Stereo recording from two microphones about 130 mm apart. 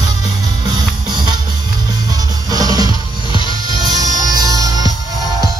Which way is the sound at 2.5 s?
30° right (ahead or behind).